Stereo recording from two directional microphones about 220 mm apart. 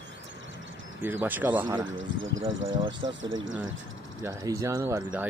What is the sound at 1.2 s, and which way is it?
Speech, 10° right (ahead or behind).